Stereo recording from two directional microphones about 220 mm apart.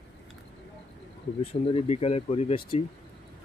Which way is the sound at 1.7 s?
30° left (ahead or behind).